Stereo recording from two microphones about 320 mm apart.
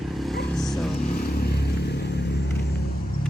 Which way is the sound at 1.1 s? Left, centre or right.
Left.